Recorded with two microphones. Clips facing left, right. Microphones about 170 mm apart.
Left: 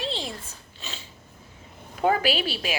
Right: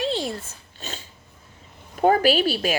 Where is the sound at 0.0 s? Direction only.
45° right (ahead or behind).